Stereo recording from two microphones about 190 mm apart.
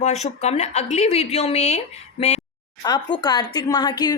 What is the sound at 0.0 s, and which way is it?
Speech, 35° left (ahead or behind).